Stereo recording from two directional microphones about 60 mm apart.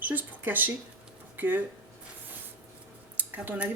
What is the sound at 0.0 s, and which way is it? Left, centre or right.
Speech, right.